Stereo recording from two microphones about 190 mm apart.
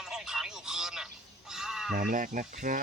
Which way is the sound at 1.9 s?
45° right (ahead or behind).